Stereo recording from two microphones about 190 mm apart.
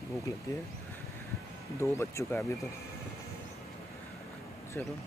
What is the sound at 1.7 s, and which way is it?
Speech, 15° left (ahead or behind).